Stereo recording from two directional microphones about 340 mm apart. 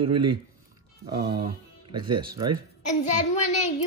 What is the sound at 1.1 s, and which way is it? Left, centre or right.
Speech, right.